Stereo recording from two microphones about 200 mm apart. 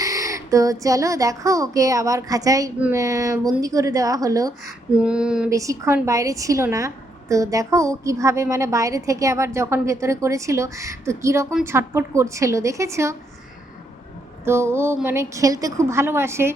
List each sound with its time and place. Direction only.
0.0 s a woman's voice: 15° right (ahead or behind)
4.9 s female singing: 5° right (ahead or behind)
5.5 s a woman's voice: 15° right (ahead or behind)
14.4 s a woman's voice: 15° right (ahead or behind)